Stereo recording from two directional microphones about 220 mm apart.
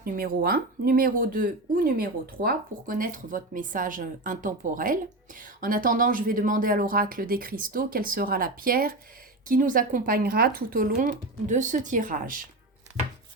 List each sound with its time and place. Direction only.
0.0 s speech: 40° right (ahead or behind)